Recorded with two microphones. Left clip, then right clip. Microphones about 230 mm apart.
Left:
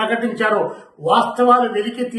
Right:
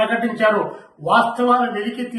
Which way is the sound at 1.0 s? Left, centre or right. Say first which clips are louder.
Even; centre.